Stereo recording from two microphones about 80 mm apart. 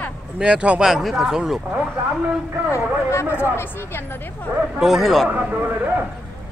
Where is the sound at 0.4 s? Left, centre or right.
Centre.